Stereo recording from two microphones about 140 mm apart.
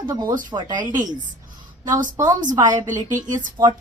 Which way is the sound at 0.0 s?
30° right (ahead or behind).